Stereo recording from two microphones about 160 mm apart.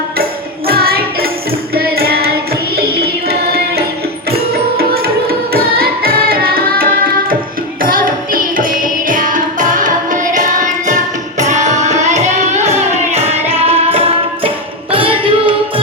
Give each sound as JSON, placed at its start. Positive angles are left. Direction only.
{"t": 0.7, "sound": "music", "side_deg": -70}
{"t": 1.7, "sound": "child singing", "side_deg": -75}
{"t": 2.7, "sound": "music", "side_deg": -80}
{"t": 4.8, "sound": "carnatic music", "side_deg": -75}
{"t": 12.0, "sound": "music", "side_deg": -45}